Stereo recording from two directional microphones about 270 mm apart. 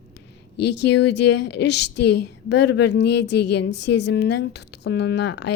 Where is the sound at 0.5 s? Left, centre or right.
Left.